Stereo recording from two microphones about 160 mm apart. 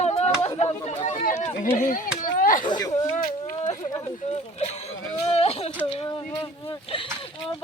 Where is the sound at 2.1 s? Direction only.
60° left (ahead or behind).